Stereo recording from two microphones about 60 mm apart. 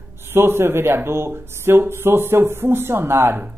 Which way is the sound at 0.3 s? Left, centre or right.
Right.